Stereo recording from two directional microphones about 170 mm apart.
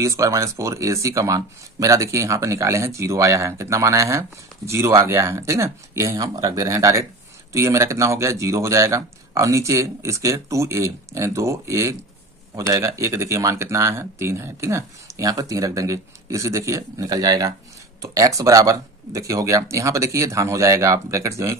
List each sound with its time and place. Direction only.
0.0 s speech: 20° right (ahead or behind)